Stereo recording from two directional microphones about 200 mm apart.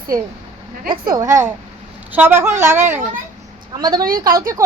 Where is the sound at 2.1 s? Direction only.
10° right (ahead or behind).